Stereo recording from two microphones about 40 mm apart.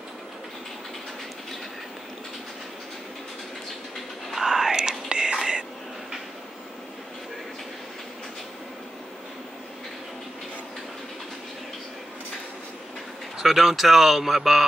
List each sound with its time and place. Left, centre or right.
4.3 s whispering: centre
13.4 s speech: centre